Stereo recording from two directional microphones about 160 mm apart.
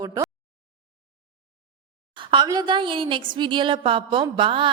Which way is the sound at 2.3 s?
25° right (ahead or behind).